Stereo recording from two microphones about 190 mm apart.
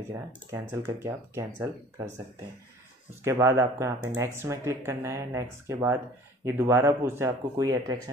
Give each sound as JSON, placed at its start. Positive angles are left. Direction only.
{"t": 0.1, "sound": "speech", "side_deg": -15}
{"t": 3.3, "sound": "speech", "side_deg": -15}